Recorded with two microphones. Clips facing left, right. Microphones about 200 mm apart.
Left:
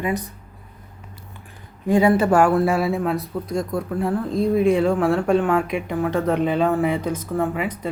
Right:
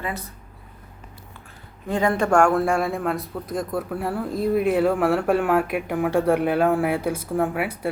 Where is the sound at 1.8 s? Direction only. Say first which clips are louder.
Left 5 dB; 10° left (ahead or behind).